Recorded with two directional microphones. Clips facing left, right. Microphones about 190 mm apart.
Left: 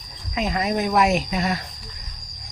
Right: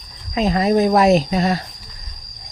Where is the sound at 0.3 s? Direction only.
35° right (ahead or behind).